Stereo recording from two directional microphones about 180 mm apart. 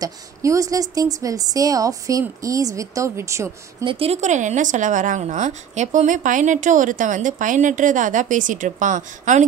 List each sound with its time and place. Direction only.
0.0 s speech: 20° right (ahead or behind)
3.8 s speech: 30° right (ahead or behind)